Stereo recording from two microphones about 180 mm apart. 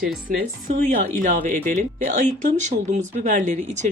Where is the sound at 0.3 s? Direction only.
45° right (ahead or behind).